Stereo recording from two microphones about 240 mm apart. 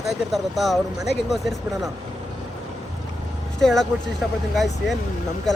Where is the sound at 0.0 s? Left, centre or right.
Centre.